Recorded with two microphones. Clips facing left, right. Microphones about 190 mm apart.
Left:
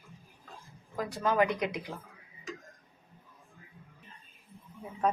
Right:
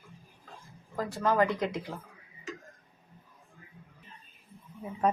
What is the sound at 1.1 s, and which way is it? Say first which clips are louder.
Speech: right 2 dB; centre (ahead or behind).